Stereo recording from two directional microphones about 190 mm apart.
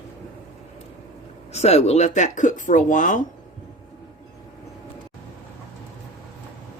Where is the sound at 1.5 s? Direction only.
35° left (ahead or behind).